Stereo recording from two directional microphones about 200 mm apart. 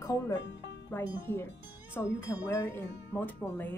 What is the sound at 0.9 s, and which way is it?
Speech, 15° left (ahead or behind).